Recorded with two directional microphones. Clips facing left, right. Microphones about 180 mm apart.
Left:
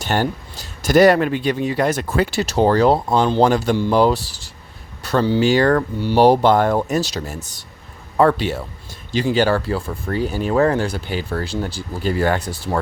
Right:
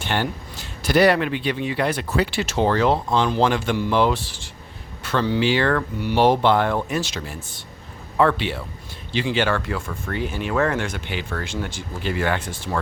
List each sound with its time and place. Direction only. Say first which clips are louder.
0.0 s speech: left 4 dB; 40° left (ahead or behind)